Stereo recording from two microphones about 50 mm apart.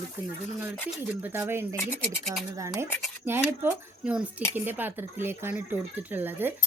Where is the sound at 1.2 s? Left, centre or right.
Right.